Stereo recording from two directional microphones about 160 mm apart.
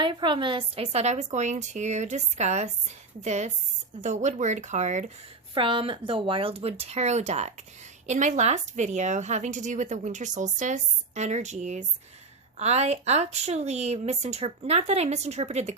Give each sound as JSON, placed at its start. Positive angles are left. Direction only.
{"t": 0.0, "sound": "a woman's voice", "side_deg": -30}
{"t": 5.5, "sound": "a woman's voice", "side_deg": -30}